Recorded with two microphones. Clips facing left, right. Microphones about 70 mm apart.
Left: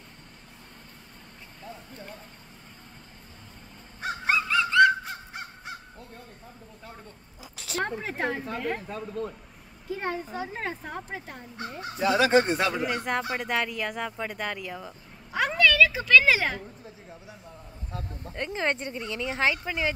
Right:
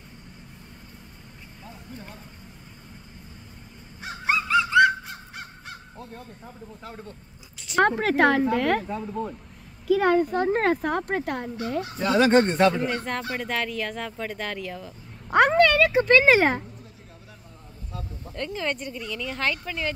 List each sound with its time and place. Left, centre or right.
4.3 s crow: centre
4.6 s goose: centre
8.0 s speech: right
8.8 s speech: centre
9.8 s a child's voice: right
10.3 s speech: right
12.0 s speech: centre
15.2 s a sound: right
15.5 s speech: right
18.3 s speech: centre
18.6 s a woman's voice: left; by 19.9 s centre